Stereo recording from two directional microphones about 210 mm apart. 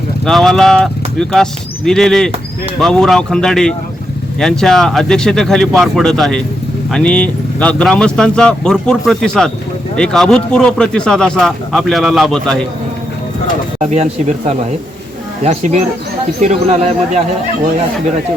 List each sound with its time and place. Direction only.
0.3 s speech: centre (ahead or behind)
13.7 s speech: 30° right (ahead or behind)